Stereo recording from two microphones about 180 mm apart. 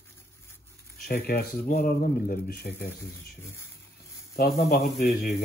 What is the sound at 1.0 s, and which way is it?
Speech, 55° left (ahead or behind).